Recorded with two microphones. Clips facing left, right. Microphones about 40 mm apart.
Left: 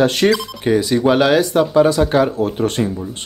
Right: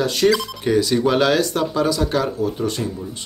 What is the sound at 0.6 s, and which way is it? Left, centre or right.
Speech, centre.